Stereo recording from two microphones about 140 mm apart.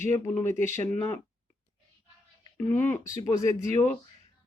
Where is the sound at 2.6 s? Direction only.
15° left (ahead or behind).